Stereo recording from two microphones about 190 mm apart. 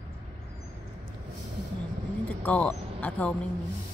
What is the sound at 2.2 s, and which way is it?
Speech, 5° left (ahead or behind).